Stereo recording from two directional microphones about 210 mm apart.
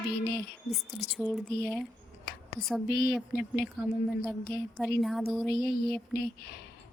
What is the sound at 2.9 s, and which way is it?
Speech, 50° left (ahead or behind).